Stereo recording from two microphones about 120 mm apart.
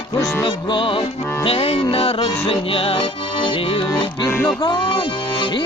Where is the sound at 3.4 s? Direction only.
45° left (ahead or behind).